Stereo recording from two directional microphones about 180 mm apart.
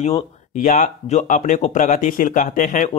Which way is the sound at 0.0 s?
40° left (ahead or behind).